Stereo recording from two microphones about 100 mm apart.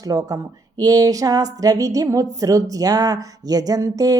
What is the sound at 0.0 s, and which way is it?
Speech, 40° right (ahead or behind).